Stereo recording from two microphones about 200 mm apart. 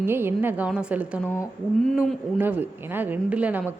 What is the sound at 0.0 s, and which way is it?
A woman's voice, 10° right (ahead or behind).